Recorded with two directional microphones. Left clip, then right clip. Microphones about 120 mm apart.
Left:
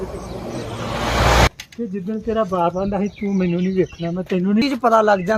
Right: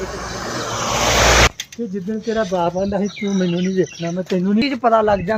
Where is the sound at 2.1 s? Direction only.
20° left (ahead or behind).